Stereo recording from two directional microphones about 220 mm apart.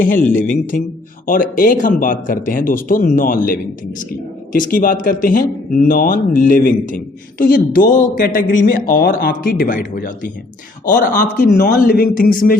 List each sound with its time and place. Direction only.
0.0 s a man's voice: 35° left (ahead or behind)
4.5 s a man's voice: 40° left (ahead or behind)